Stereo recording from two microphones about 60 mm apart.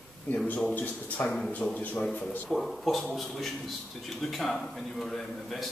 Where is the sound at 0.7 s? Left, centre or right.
Left.